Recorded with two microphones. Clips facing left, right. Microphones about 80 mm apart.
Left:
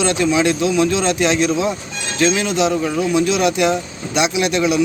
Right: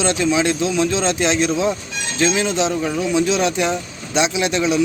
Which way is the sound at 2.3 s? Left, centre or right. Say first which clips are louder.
Left 1 dB; right.